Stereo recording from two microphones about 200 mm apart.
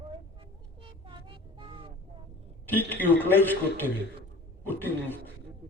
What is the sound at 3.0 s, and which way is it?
Speech, 10° left (ahead or behind).